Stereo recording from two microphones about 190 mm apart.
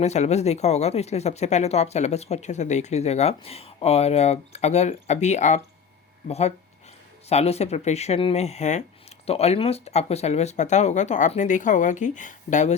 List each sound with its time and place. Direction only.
0.0 s speech: 35° left (ahead or behind)